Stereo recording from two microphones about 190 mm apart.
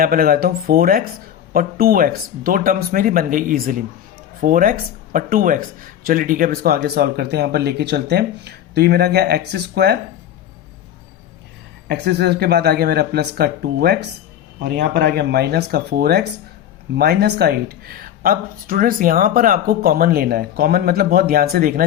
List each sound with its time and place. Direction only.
0.0 s speech: 50° right (ahead or behind)
11.9 s speech: 60° right (ahead or behind)